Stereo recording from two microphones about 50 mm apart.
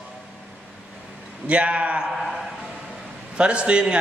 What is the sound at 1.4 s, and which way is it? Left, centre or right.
Speech, right.